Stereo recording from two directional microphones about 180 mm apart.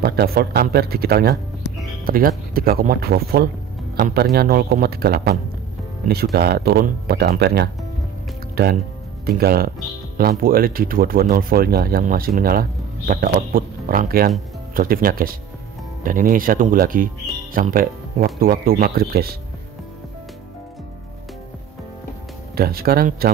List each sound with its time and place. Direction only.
0.0 s speech: 60° right (ahead or behind)
22.6 s speech: 55° right (ahead or behind)